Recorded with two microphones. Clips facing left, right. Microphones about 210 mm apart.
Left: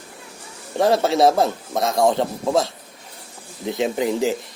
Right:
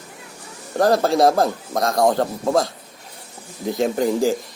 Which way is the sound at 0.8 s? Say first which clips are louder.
Right 1 dB; centre (ahead or behind).